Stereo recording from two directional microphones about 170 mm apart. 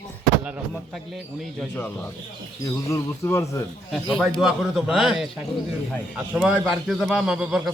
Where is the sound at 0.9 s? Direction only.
Centre (ahead or behind).